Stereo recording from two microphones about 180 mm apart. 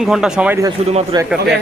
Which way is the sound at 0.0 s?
5° right (ahead or behind).